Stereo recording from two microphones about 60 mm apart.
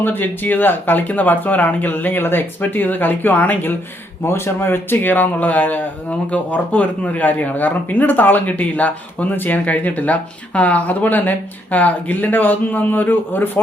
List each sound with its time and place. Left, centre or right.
0.0 s speech: left
4.2 s speech: left